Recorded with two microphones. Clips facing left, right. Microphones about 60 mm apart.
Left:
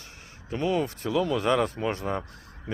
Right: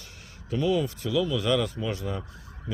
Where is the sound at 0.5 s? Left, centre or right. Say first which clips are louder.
Right 1 dB; left.